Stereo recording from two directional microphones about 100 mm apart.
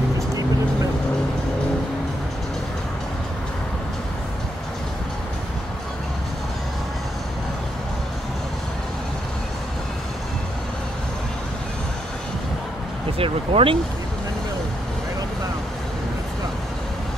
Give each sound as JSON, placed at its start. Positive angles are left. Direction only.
{"t": 13.2, "sound": "speech", "side_deg": -70}